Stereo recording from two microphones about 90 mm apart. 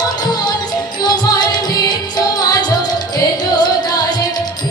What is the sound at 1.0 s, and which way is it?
Music, 50° left (ahead or behind).